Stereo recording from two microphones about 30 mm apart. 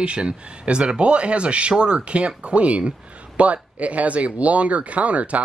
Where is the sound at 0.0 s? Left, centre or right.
Right.